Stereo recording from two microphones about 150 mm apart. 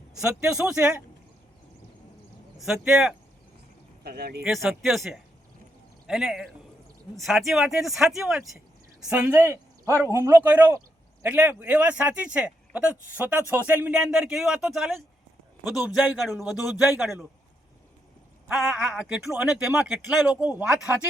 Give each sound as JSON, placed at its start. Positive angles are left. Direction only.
{"t": 0.1, "sound": "speech", "side_deg": -5}
{"t": 2.6, "sound": "speech", "side_deg": -5}
{"t": 4.0, "sound": "speech", "side_deg": -90}
{"t": 4.4, "sound": "speech", "side_deg": 0}
{"t": 18.4, "sound": "speech", "side_deg": 0}